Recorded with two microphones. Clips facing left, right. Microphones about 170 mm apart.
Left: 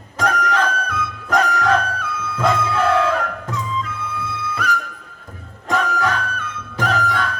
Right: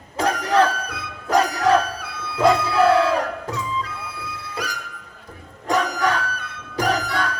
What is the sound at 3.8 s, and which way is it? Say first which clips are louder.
Music: left 5 dB; 40° right (ahead or behind).